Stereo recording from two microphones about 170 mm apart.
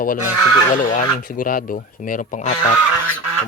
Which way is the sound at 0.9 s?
55° left (ahead or behind).